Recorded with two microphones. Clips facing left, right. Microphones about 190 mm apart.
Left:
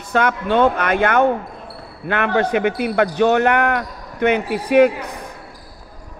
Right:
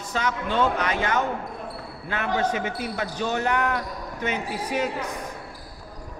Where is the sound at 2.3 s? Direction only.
65° left (ahead or behind).